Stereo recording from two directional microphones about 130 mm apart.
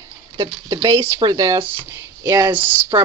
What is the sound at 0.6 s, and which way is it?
Speech, 35° right (ahead or behind).